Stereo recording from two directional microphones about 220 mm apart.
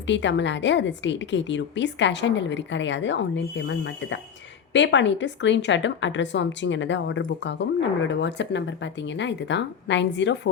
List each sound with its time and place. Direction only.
0.1 s a woman's voice: 55° left (ahead or behind)